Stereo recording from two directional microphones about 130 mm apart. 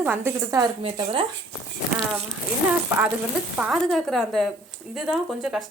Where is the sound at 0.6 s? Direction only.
40° right (ahead or behind).